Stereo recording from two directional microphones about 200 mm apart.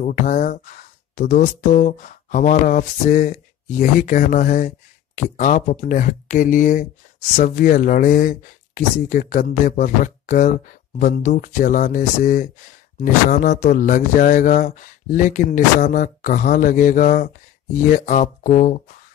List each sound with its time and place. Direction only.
0.0 s speech: 40° left (ahead or behind)